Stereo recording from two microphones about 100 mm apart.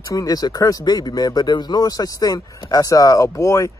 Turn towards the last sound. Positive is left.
turn(degrees=30)  # may be behind; listen again after turning